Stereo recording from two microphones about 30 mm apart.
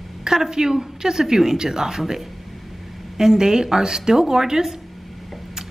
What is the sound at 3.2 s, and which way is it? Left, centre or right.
A woman's voice, right.